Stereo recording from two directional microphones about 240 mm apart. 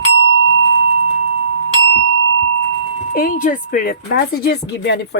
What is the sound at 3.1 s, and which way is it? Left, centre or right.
Speech, left.